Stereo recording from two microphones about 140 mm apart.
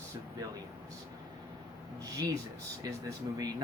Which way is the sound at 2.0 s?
25° right (ahead or behind).